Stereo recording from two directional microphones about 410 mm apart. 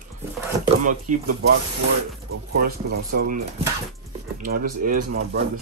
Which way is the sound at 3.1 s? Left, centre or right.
Right.